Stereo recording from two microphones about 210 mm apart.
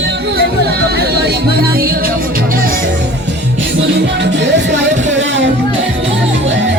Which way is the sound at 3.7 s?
55° right (ahead or behind).